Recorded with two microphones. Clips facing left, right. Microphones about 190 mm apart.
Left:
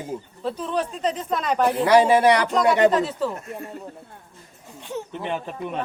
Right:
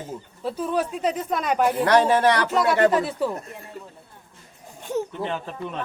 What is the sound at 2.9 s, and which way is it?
Speech, 10° right (ahead or behind).